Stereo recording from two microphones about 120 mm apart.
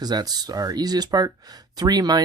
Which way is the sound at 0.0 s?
35° right (ahead or behind).